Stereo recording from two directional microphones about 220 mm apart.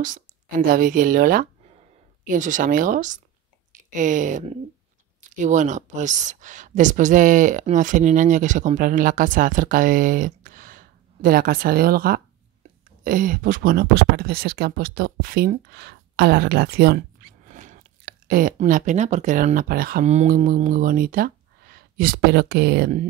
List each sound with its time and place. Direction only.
0.0 s speech: 35° right (ahead or behind)
1.7 s a sound: 30° right (ahead or behind)
3.9 s speech: 35° right (ahead or behind)
17.5 s speech: 35° right (ahead or behind)